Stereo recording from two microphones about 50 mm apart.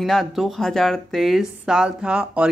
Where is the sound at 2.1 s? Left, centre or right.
Right.